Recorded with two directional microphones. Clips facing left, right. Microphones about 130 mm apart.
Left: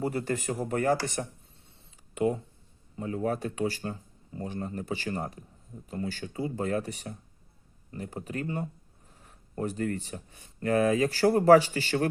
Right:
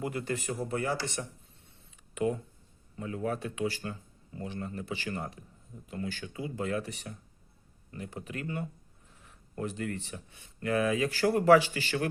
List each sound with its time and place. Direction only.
0.0 s speech: 40° left (ahead or behind)
2.1 s speech: 30° left (ahead or behind)